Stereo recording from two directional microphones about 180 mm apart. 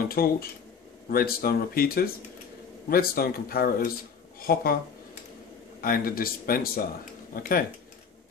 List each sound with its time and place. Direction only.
0.0 s speech: 55° left (ahead or behind)
5.8 s speech: 55° left (ahead or behind)